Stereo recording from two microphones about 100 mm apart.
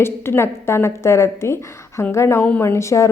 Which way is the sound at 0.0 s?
25° left (ahead or behind).